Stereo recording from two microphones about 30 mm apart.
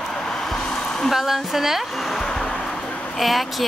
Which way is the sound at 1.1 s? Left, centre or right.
Centre.